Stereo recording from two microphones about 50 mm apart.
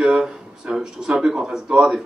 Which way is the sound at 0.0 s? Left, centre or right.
Centre.